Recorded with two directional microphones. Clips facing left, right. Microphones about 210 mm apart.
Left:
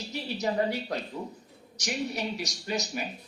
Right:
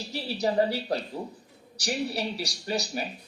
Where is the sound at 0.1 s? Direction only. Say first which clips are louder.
Right 3 dB; 35° right (ahead or behind).